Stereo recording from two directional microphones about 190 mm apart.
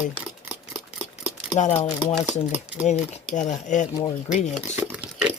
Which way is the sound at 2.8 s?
40° left (ahead or behind).